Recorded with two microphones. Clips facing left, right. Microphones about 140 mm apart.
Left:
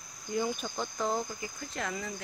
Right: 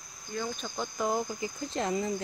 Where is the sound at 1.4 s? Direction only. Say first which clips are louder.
Right 5 dB; 30° right (ahead or behind).